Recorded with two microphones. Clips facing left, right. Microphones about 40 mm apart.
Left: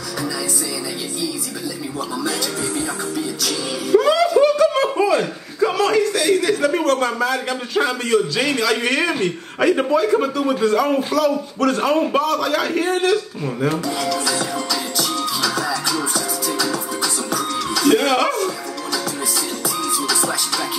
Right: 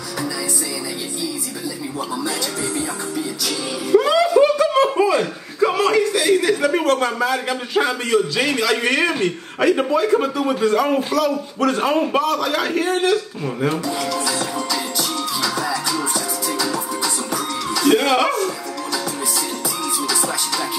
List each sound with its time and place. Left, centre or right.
3.4 s music: centre
4.8 s chuckle: centre
9.6 s a man's voice: centre
13.9 s music: centre
15.5 s music: centre
20.1 s music: centre